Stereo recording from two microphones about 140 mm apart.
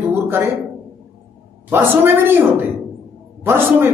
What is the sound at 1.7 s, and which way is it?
A man's voice, 15° right (ahead or behind).